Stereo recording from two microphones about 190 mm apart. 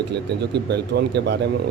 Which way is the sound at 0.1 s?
60° right (ahead or behind).